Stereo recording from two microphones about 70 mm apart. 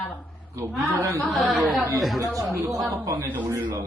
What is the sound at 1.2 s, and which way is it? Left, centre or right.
Speech, centre.